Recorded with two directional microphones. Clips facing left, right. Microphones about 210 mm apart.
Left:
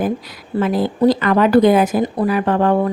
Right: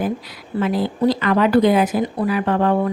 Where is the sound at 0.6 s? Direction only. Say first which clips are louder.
Left 3 dB; 45° left (ahead or behind).